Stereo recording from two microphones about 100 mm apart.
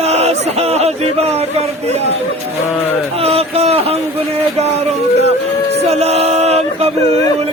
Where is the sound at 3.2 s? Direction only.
80° right.